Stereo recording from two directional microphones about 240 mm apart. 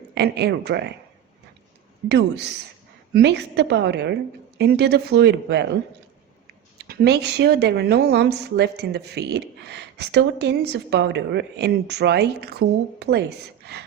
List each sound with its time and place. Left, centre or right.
0.1 s a woman's voice: right
2.0 s a woman's voice: right
6.7 s a woman's voice: right